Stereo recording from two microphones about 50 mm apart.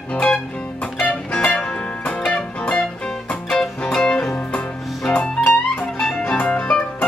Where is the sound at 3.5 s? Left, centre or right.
Centre.